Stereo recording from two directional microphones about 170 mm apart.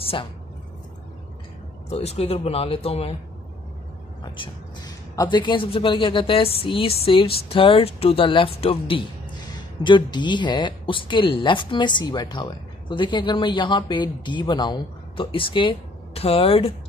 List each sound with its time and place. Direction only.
1.9 s a woman's voice: 40° left (ahead or behind)
5.1 s a woman's voice: 25° left (ahead or behind)